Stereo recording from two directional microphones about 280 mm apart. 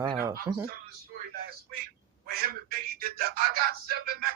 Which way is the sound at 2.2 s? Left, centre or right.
Right.